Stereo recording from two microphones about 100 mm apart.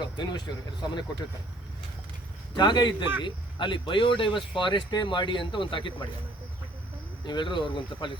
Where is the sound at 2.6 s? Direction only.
50° left (ahead or behind).